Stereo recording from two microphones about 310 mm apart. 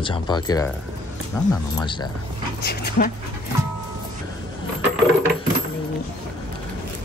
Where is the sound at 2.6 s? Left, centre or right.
Left.